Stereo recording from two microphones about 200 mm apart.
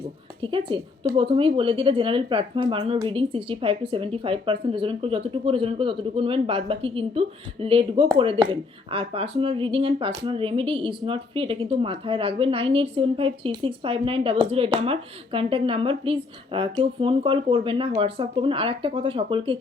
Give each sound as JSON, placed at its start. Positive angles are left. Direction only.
{"t": 0.4, "sound": "speech", "side_deg": -25}